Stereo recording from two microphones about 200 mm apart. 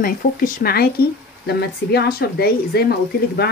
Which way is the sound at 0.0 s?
45° left (ahead or behind).